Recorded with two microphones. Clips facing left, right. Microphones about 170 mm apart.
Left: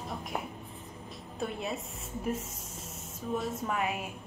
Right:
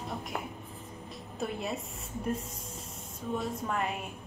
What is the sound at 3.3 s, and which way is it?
Speech, 5° left (ahead or behind).